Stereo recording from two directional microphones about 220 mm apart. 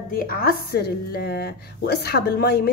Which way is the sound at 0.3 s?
45° left (ahead or behind).